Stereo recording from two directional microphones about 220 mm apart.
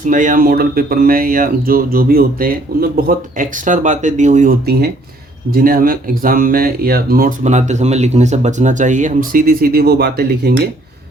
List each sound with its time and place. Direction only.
0.0 s speech: 35° right (ahead or behind)